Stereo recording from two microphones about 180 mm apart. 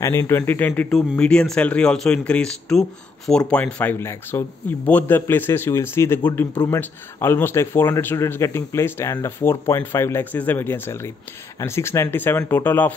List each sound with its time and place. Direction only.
0.0 s a man's voice: 15° left (ahead or behind)
6.8 s a man's voice: 10° left (ahead or behind)